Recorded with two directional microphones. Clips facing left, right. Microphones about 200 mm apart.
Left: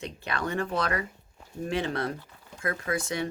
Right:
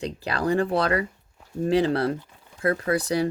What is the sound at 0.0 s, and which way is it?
Speech, 35° right (ahead or behind).